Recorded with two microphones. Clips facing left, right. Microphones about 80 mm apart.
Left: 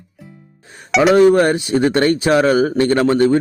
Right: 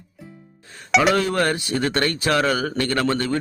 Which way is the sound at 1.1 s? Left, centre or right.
Left.